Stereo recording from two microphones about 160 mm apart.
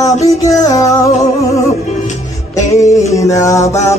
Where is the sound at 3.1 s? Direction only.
20° left (ahead or behind).